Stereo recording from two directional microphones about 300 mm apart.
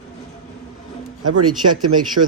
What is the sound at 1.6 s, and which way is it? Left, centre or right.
Speech, right.